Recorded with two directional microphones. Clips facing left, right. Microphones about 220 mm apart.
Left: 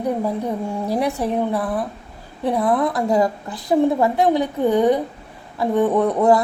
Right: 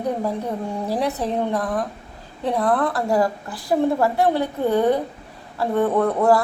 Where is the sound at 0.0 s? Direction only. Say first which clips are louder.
Left 2 dB; 10° left (ahead or behind).